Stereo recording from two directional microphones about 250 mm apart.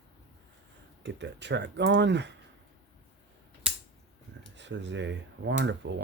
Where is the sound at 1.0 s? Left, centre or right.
Right.